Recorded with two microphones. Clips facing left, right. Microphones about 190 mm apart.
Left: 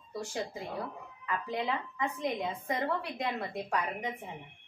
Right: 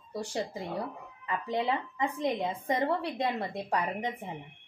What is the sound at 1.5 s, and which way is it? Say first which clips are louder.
A woman's voice: right 5 dB; 30° right (ahead or behind).